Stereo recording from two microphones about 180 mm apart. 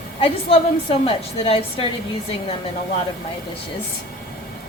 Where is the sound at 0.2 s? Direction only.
30° left (ahead or behind).